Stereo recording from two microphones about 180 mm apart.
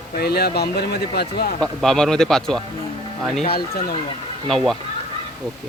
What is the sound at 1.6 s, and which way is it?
A man's voice, 5° left (ahead or behind).